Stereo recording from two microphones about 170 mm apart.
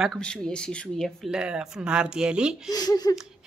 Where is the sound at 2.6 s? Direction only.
20° left (ahead or behind).